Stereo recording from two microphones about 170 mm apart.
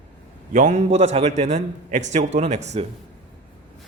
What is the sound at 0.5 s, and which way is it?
A man's voice, 45° right (ahead or behind).